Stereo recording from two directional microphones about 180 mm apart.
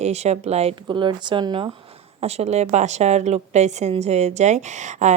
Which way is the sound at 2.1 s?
35° right (ahead or behind).